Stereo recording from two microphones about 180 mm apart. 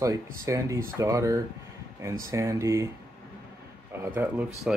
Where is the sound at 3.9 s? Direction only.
10° right (ahead or behind).